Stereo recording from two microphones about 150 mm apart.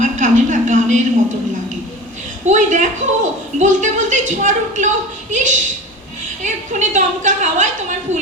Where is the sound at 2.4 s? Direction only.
55° right (ahead or behind).